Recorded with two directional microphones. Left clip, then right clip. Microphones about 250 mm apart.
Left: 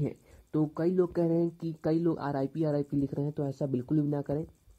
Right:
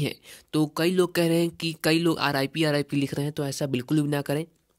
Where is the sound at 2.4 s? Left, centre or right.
Right.